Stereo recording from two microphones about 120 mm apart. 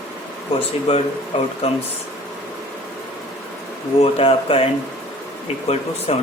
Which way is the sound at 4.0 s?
55° left (ahead or behind).